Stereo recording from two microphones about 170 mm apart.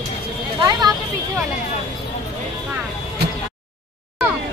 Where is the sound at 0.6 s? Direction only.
20° right (ahead or behind).